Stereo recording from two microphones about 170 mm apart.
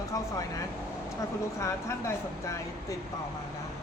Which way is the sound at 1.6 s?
15° left (ahead or behind).